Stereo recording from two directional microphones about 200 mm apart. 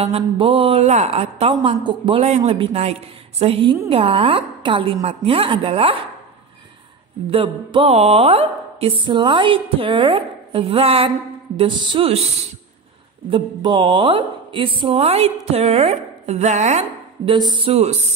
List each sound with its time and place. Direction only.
0.0 s a woman's voice: 30° right (ahead or behind)
7.2 s a woman's voice: 25° right (ahead or behind)
13.3 s a woman's voice: 25° right (ahead or behind)